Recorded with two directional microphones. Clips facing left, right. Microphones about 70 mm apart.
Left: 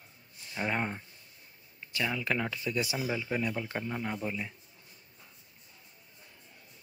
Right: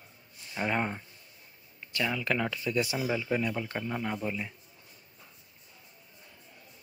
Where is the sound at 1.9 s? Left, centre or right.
Centre.